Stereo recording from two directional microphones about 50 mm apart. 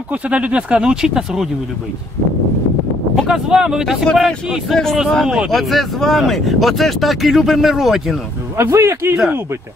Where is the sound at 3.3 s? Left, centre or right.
Centre.